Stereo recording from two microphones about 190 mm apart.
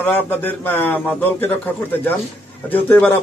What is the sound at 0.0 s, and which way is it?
A man's voice, 10° left (ahead or behind).